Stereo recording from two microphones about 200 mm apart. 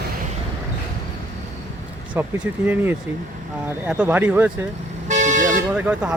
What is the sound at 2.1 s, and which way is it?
Speech, 10° right (ahead or behind).